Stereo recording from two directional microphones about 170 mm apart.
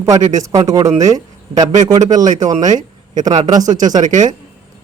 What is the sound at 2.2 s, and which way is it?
Speech, 45° right (ahead or behind).